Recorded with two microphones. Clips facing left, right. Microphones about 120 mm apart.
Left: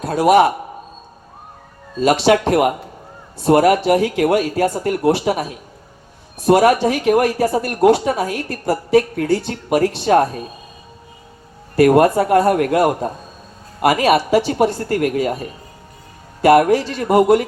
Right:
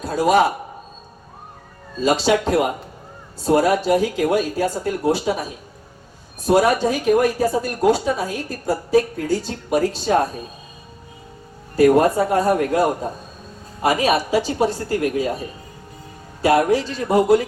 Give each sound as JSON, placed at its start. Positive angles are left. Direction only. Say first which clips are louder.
{"t": 0.0, "sound": "speech", "louder": "left 4 dB", "side_deg": 65}
{"t": 2.0, "sound": "speech", "louder": "left 4 dB", "side_deg": 70}
{"t": 11.8, "sound": "speech", "louder": "left 2 dB", "side_deg": 65}
{"t": 16.4, "sound": "speech", "louder": "left 4 dB", "side_deg": 60}